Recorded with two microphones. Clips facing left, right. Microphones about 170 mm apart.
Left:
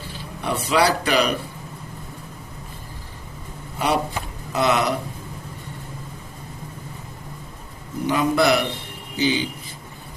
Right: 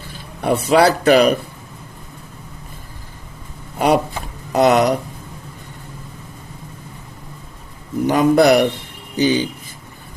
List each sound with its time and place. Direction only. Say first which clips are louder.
0.4 s speech: right 6 dB; 50° right (ahead or behind)
3.8 s speech: right 6 dB; 50° right (ahead or behind)
8.0 s speech: right 6 dB; 45° right (ahead or behind)